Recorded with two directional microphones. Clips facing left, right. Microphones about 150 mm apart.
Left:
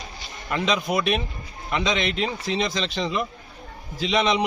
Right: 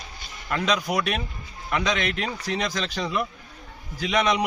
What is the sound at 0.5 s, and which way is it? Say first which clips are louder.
A man's voice: left 1 dB; 20° left (ahead or behind).